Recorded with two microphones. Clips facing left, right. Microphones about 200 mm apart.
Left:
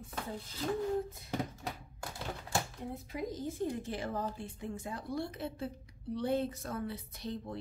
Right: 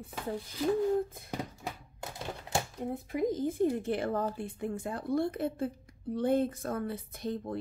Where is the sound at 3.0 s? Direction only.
55° right (ahead or behind).